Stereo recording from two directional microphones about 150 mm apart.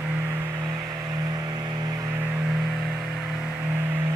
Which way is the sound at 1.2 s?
25° right (ahead or behind).